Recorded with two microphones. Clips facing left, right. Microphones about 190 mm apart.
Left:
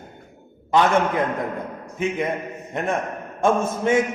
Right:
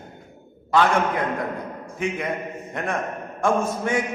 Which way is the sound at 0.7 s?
20° left (ahead or behind).